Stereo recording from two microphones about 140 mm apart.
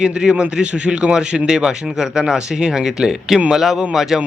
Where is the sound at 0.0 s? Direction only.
5° right (ahead or behind).